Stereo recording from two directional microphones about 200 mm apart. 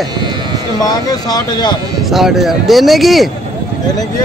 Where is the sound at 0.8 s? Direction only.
20° left (ahead or behind).